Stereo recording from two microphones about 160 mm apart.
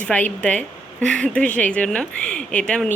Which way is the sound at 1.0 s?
5° left (ahead or behind).